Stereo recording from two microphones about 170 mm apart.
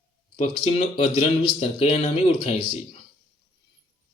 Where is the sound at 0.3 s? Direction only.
40° left (ahead or behind).